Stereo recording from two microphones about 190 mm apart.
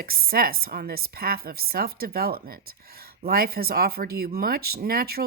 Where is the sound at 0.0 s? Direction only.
50° right (ahead or behind).